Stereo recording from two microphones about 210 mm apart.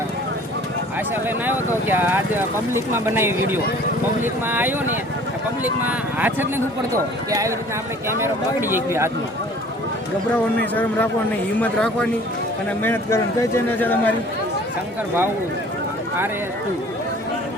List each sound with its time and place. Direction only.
1.1 s speech: 10° right (ahead or behind)
6.1 s speech: 10° right (ahead or behind)
10.3 s a man's voice: 10° left (ahead or behind)